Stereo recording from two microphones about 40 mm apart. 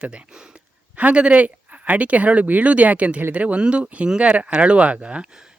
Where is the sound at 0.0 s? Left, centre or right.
Right.